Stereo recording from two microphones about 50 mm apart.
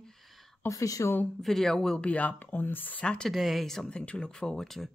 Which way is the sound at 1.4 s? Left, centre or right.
Centre.